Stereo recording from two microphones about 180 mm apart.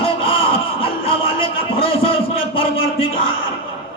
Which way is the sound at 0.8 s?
30° left (ahead or behind).